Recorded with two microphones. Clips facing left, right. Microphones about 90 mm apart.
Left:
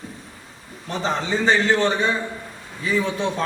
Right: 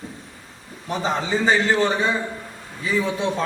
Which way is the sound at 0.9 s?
5° right (ahead or behind).